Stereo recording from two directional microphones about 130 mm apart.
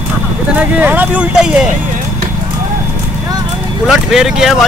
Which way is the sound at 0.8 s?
10° right (ahead or behind).